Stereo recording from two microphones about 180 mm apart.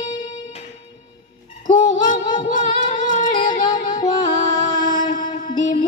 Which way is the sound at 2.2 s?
25° left (ahead or behind).